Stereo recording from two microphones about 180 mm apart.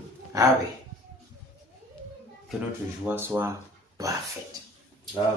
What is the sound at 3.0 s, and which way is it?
Speech, 10° right (ahead or behind).